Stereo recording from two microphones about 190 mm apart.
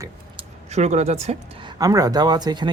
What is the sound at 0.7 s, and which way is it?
A woman's voice, 35° right (ahead or behind).